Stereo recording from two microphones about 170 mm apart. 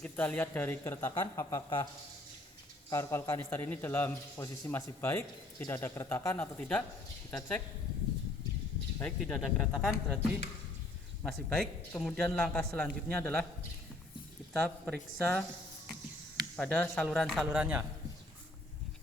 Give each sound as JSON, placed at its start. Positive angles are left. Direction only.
{"t": 0.0, "sound": "speech", "side_deg": 10}
{"t": 2.9, "sound": "speech", "side_deg": 15}
{"t": 9.0, "sound": "a man's voice", "side_deg": 5}
{"t": 11.2, "sound": "a man's voice", "side_deg": 5}
{"t": 14.5, "sound": "a man's voice", "side_deg": 0}
{"t": 16.6, "sound": "a man's voice", "side_deg": 5}